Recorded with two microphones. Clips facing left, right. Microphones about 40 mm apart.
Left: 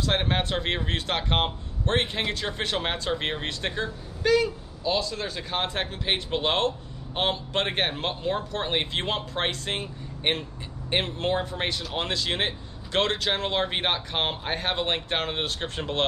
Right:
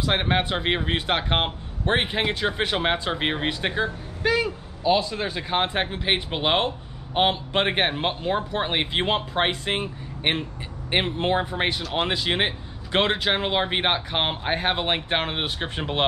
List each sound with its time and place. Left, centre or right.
0.0 s speech: centre